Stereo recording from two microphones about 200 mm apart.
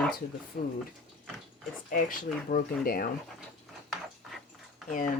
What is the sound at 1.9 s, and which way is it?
Speech, 45° left (ahead or behind).